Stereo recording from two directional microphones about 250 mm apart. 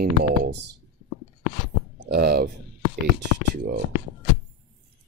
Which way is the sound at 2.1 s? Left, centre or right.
Right.